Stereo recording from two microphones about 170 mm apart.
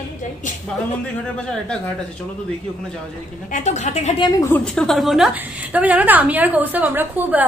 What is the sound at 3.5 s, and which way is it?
Speech, 45° left (ahead or behind).